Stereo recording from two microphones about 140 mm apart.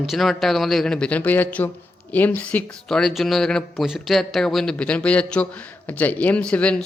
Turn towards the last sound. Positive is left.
turn(degrees=10)  # may be behind; listen again after turning